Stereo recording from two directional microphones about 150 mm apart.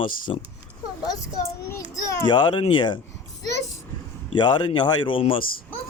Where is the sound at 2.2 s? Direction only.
30° left (ahead or behind).